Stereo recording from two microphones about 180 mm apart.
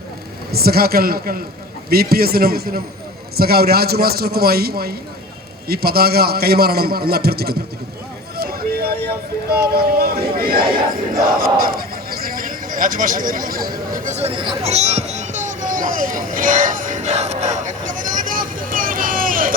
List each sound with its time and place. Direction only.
0.5 s a man's voice: 60° right (ahead or behind)
8.4 s vehicle: 60° right (ahead or behind)
9.5 s speech: 60° right (ahead or behind)